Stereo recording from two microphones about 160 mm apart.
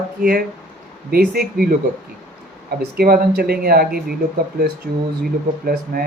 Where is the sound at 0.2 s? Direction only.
70° right (ahead or behind).